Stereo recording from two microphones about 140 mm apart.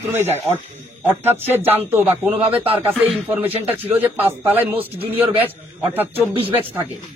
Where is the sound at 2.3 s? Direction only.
40° right (ahead or behind).